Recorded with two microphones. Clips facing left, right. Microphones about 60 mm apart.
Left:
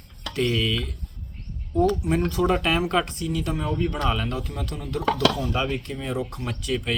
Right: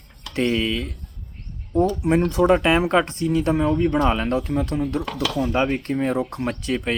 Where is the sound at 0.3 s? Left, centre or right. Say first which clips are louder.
Right 3 dB; right.